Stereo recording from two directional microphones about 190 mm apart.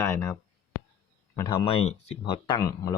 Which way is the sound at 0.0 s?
15° left (ahead or behind).